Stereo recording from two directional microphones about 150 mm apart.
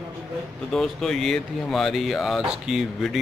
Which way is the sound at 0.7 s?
Centre (ahead or behind).